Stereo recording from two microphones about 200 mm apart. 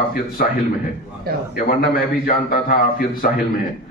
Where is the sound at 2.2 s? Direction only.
45° left (ahead or behind).